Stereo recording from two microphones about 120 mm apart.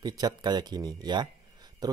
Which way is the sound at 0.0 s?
35° right (ahead or behind).